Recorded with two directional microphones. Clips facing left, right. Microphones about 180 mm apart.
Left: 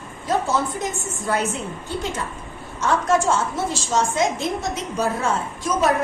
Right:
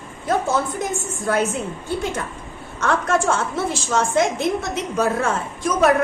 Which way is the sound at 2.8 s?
55° right (ahead or behind).